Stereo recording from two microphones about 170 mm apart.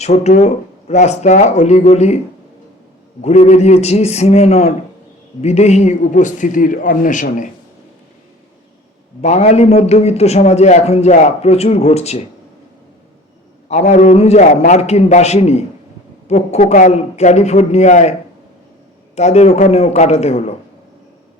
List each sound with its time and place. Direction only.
0.0 s a man's voice: 40° left (ahead or behind)
9.2 s a man's voice: 40° left (ahead or behind)
13.7 s a man's voice: 40° left (ahead or behind)
19.1 s a man's voice: 40° left (ahead or behind)